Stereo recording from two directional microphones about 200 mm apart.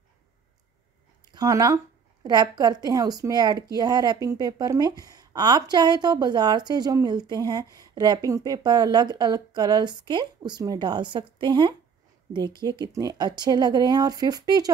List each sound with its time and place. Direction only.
1.3 s a woman's voice: 20° right (ahead or behind)